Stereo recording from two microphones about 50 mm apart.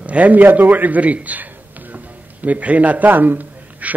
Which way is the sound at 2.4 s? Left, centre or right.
Right.